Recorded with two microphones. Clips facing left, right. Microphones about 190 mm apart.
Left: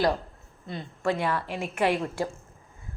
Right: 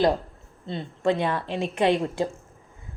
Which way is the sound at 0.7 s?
25° right (ahead or behind).